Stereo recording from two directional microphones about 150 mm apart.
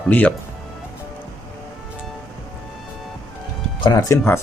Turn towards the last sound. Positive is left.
turn(degrees=25)  # may be behind; listen again after turning